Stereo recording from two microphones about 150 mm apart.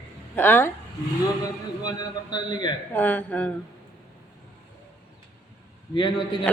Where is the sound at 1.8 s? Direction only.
30° left (ahead or behind).